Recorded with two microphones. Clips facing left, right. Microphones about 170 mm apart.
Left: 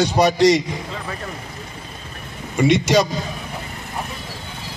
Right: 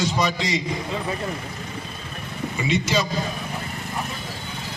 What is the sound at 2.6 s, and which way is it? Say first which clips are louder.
Speech: left 8 dB; 80° left.